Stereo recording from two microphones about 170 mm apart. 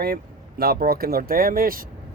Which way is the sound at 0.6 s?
65° right (ahead or behind).